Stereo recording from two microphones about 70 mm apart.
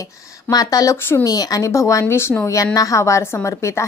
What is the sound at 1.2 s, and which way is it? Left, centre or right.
A woman's voice, left.